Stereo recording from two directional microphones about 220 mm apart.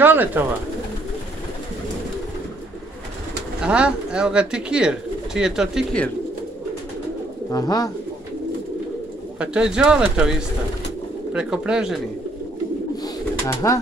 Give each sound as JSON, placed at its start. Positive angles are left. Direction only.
{"t": 0.0, "sound": "speech", "side_deg": -10}
{"t": 3.6, "sound": "speech", "side_deg": -5}
{"t": 7.5, "sound": "speech", "side_deg": 15}
{"t": 9.4, "sound": "speech", "side_deg": -5}
{"t": 11.3, "sound": "speech", "side_deg": -5}
{"t": 13.0, "sound": "bird", "side_deg": 15}